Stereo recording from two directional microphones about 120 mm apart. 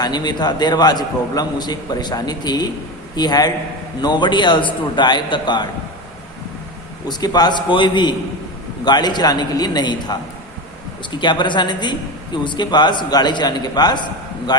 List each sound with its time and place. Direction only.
0.0 s a man's voice: 35° left (ahead or behind)
7.1 s a man's voice: 35° left (ahead or behind)
11.2 s a man's voice: 40° left (ahead or behind)